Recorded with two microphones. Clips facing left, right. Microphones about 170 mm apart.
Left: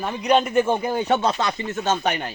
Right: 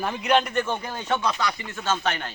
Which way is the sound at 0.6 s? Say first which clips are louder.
Left 8 dB; 30° left (ahead or behind).